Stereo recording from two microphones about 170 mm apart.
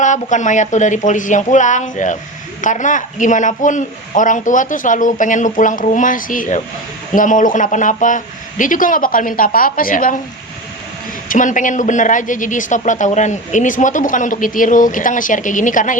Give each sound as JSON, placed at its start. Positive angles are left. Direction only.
{"t": 0.0, "sound": "speech", "side_deg": 45}
{"t": 11.3, "sound": "speech", "side_deg": 50}